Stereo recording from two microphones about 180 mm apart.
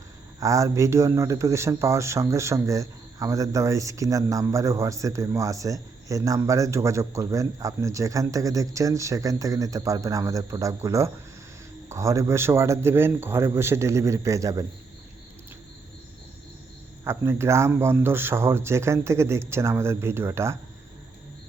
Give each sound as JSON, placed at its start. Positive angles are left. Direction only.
{"t": 0.3, "sound": "speech", "side_deg": -20}
{"t": 17.0, "sound": "speech", "side_deg": -15}